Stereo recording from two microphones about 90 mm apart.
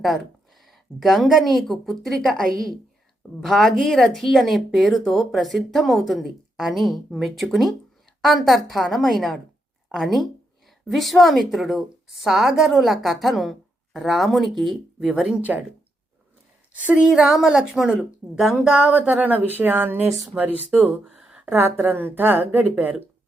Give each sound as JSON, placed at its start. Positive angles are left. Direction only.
{"t": 0.7, "sound": "speech", "side_deg": 0}
{"t": 16.7, "sound": "a woman's voice", "side_deg": -10}